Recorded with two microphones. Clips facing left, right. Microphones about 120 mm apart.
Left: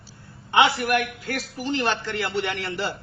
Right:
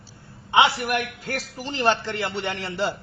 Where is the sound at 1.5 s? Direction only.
30° right (ahead or behind).